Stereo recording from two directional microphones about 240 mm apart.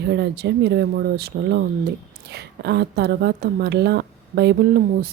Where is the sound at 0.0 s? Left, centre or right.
Right.